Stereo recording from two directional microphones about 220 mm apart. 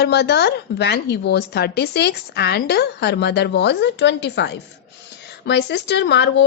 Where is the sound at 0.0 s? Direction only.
50° left (ahead or behind).